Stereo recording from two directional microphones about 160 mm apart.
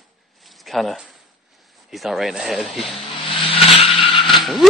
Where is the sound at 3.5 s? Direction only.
35° left (ahead or behind).